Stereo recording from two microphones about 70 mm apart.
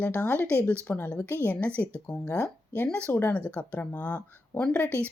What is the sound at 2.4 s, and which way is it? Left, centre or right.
Speech, left.